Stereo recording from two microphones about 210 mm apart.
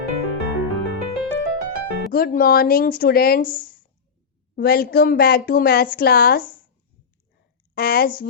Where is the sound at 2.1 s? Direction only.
45° left (ahead or behind).